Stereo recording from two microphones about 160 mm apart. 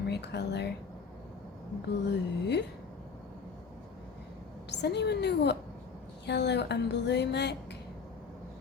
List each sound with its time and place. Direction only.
0.1 s speech: 90° left
2.0 s speech: 90° left
4.7 s speech: 90° left